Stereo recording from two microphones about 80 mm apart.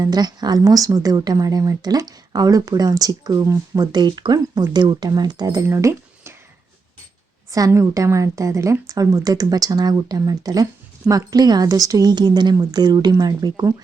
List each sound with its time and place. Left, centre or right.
0.0 s speech: right
3.8 s speech: right
5.6 s a sound: right
7.7 s speech: right